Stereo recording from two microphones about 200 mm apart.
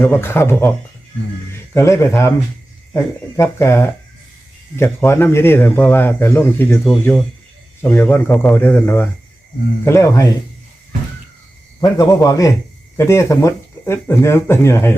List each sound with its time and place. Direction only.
0.0 s speech: 10° left (ahead or behind)
1.7 s speech: 15° left (ahead or behind)
11.8 s speech: 20° left (ahead or behind)